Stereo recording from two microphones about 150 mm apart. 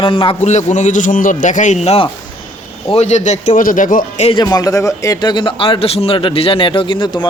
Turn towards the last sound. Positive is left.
turn(degrees=35)  # may be behind; listen again after turning